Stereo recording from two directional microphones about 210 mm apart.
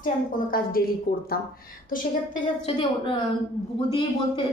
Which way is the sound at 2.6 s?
25° left (ahead or behind).